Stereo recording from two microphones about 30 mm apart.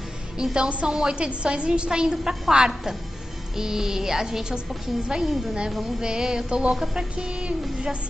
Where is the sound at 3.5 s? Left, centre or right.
Centre.